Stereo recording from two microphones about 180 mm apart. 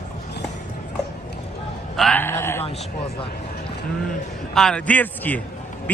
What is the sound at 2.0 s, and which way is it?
Speech, 10° left (ahead or behind).